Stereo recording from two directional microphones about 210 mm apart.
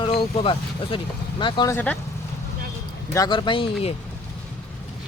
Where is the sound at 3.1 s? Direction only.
20° left (ahead or behind).